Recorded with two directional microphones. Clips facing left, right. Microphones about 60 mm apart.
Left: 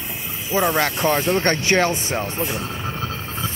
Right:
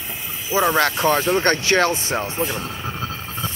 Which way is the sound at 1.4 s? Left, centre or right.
Left.